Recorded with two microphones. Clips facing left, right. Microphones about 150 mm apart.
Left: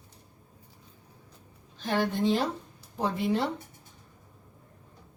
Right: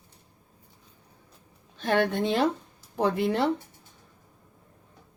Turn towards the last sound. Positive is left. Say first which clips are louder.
# right 4 dB
turn(degrees=-65)  # may be behind; listen again after turning